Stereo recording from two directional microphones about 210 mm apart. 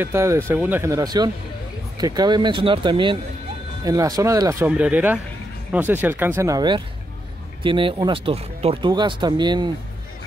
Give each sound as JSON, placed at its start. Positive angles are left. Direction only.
{"t": 0.0, "sound": "speech", "side_deg": -10}